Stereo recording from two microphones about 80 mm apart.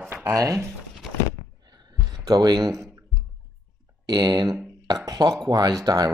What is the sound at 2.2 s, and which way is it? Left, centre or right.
Speech, right.